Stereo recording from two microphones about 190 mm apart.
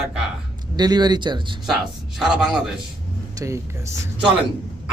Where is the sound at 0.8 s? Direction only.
20° right (ahead or behind).